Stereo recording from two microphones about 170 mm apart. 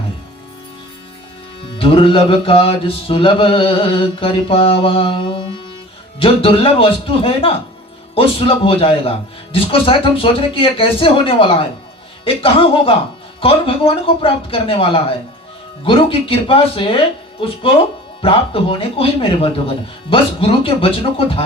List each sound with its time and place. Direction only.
1.8 s mantra: 30° left (ahead or behind)
18.2 s mantra: 30° left (ahead or behind)